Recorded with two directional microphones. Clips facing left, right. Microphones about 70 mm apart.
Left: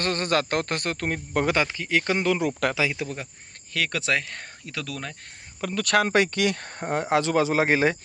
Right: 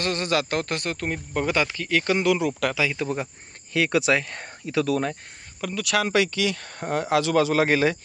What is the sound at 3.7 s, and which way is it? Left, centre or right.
Speech, centre.